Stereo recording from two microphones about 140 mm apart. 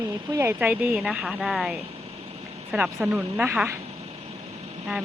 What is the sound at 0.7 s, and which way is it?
A woman's voice, 5° right (ahead or behind).